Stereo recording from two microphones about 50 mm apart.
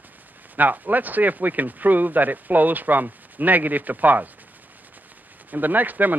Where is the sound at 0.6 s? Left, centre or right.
Right.